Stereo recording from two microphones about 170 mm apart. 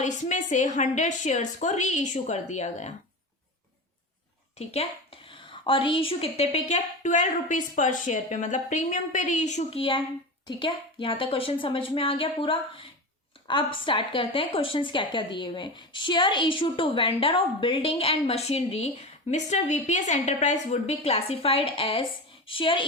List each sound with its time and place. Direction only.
0.0 s a woman's voice: 45° left (ahead or behind)
4.5 s a woman's voice: 40° left (ahead or behind)